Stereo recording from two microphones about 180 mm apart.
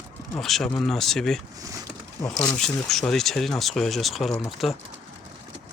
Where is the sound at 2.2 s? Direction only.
20° left (ahead or behind).